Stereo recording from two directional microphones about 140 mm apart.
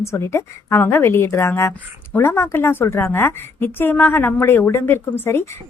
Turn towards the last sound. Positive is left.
turn(degrees=15)  # may be behind; listen again after turning